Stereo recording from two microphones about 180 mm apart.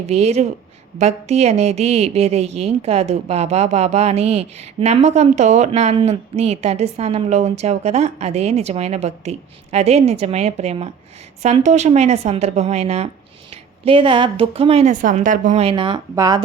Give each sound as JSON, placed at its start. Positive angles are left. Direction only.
{"t": 0.0, "sound": "a woman's voice", "side_deg": -35}